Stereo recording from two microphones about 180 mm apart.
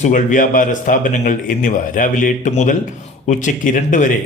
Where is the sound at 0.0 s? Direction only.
45° left (ahead or behind).